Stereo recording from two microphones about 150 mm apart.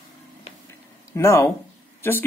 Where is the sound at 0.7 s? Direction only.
20° left (ahead or behind).